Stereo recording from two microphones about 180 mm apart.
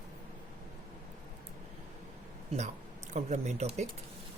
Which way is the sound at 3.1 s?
40° right (ahead or behind).